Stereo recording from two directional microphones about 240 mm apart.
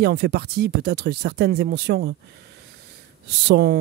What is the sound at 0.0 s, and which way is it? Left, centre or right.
Speech, right.